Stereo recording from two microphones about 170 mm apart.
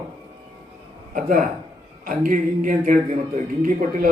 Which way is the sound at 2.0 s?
50° right (ahead or behind).